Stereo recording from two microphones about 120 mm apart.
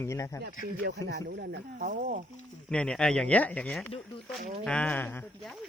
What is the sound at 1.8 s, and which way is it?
Speech, 90° right.